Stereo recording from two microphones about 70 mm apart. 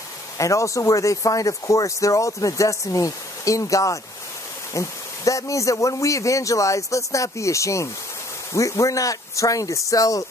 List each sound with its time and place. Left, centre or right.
0.4 s speech: left